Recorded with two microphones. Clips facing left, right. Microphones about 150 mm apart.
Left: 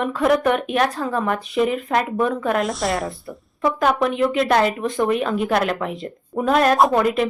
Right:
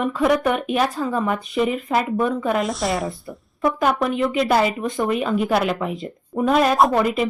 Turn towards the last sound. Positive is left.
turn(degrees=0)  # may be behind; listen again after turning